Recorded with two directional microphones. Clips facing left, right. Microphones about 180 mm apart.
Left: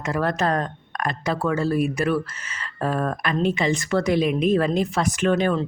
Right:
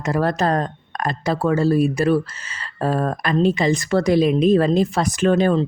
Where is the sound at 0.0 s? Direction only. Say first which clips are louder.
Right 3 dB; 35° right (ahead or behind).